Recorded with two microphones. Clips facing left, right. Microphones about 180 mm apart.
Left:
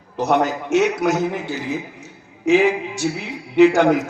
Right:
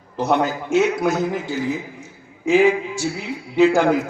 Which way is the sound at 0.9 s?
70° left (ahead or behind).